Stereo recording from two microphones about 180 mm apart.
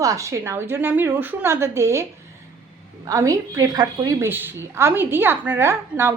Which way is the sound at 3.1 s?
20° right (ahead or behind).